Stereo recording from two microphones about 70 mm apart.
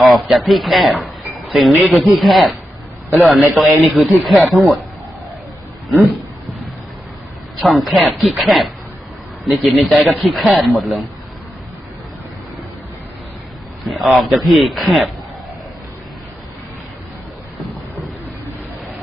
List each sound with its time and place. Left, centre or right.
0.0 s speech: centre
3.1 s a man's voice: right
3.3 s speech: centre
7.6 s speech: centre
13.8 s speech: centre